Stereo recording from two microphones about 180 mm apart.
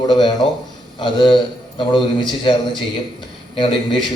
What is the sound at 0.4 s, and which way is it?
A man's voice, 30° left (ahead or behind).